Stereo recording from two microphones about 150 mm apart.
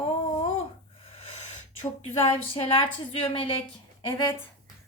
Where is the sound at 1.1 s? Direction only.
40° left (ahead or behind).